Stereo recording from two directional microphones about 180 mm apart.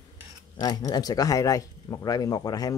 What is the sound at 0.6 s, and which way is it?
Speech, 20° left (ahead or behind).